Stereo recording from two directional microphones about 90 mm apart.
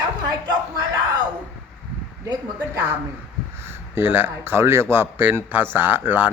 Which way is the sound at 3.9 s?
25° right (ahead or behind).